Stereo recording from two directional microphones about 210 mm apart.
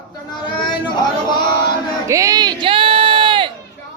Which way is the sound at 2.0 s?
15° right (ahead or behind).